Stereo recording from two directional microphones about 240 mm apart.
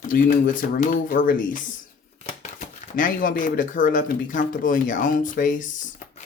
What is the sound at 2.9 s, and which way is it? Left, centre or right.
Speech, left.